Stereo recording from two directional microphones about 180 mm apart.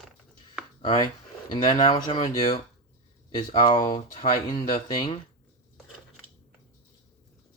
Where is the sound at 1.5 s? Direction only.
25° left (ahead or behind).